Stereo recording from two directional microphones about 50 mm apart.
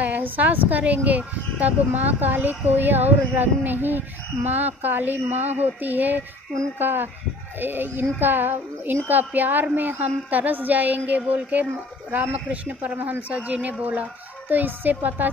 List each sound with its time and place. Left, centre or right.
0.0 s speech: right